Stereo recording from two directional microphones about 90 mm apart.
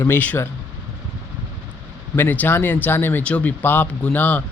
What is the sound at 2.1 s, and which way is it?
Speech, 20° left (ahead or behind).